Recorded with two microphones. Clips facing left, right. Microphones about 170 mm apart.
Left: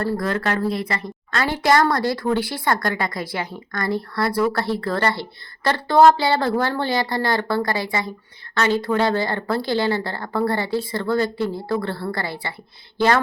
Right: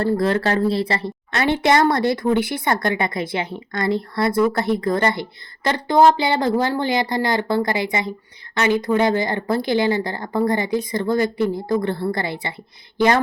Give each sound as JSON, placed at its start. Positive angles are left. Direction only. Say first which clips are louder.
{"t": 0.0, "sound": "a woman's voice", "louder": "right 4 dB", "side_deg": -25}